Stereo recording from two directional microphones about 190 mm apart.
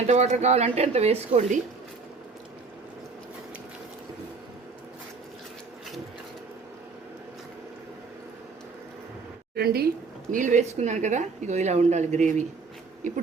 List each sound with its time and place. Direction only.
0.1 s a woman's voice: 35° right (ahead or behind)
9.6 s speech: 55° right (ahead or behind)
10.3 s a woman's voice: 40° right (ahead or behind)